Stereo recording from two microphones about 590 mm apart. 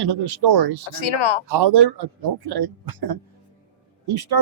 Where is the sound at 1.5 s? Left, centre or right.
Right.